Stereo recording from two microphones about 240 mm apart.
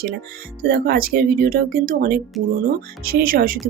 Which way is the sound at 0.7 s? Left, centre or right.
Right.